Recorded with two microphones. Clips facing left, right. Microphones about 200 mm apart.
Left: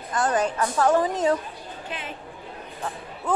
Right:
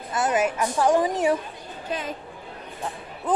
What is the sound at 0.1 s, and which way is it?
Speech, 5° right (ahead or behind).